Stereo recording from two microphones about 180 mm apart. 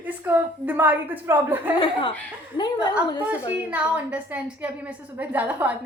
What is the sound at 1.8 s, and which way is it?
Speech, 30° left (ahead or behind).